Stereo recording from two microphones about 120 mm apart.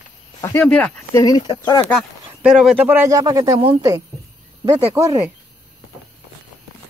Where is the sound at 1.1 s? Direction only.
30° left (ahead or behind).